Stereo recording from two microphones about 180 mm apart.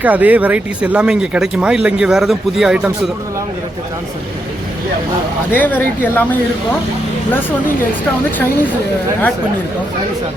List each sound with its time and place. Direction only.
0.0 s speech: 10° right (ahead or behind)
5.5 s speech: 10° left (ahead or behind)